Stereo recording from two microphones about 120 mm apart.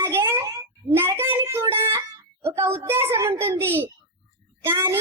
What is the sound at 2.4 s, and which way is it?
A child's voice, 20° right (ahead or behind).